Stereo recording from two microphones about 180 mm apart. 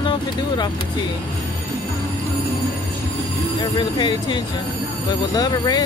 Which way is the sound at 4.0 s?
25° left (ahead or behind).